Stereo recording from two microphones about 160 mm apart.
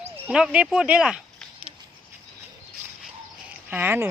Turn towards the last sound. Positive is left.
turn(degrees=-15)  # may be behind; listen again after turning